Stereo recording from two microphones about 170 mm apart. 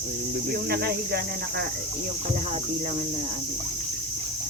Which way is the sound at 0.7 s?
70° right (ahead or behind).